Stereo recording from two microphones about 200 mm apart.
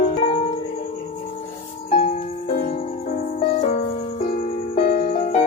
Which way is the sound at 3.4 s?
35° left (ahead or behind).